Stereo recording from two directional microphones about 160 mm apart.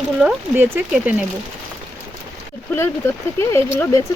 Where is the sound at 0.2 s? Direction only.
10° right (ahead or behind).